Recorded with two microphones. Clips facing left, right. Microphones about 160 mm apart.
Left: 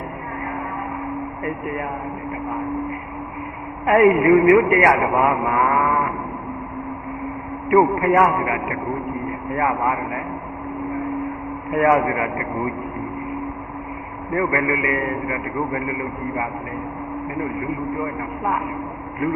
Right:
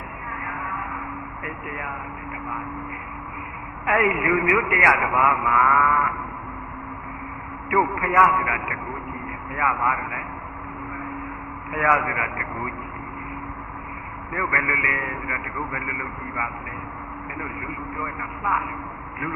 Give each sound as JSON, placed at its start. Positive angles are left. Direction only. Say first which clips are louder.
{"t": 4.1, "sound": "a man's voice", "louder": "left 9 dB", "side_deg": 35}
{"t": 8.0, "sound": "a man's voice", "louder": "left 4 dB", "side_deg": 35}
{"t": 11.7, "sound": "a man's voice", "louder": "left 6 dB", "side_deg": 35}
{"t": 14.3, "sound": "a man's voice", "louder": "left 7 dB", "side_deg": 35}
{"t": 17.9, "sound": "a man's voice", "louder": "left 7 dB", "side_deg": 35}